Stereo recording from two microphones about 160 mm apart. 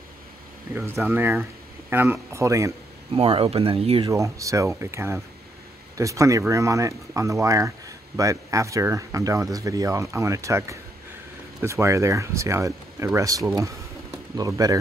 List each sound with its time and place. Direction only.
1.0 s speech: 15° right (ahead or behind)
3.1 s speech: 35° right (ahead or behind)
4.1 s speech: 20° right (ahead or behind)